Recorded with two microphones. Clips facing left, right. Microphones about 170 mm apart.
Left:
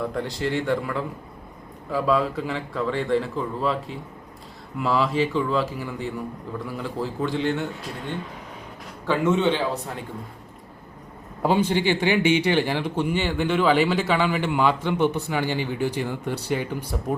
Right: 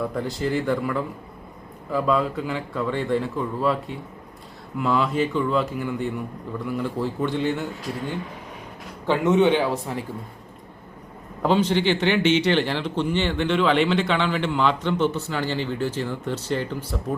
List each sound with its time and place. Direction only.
0.1 s speech: centre (ahead or behind)
9.0 s a man's voice: 15° right (ahead or behind)
11.4 s speech: 10° left (ahead or behind)